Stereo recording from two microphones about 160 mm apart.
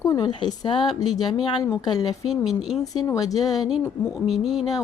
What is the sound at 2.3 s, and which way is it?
Speech, centre (ahead or behind).